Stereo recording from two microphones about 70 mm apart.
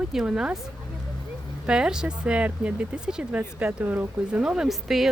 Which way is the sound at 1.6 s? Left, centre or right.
Centre.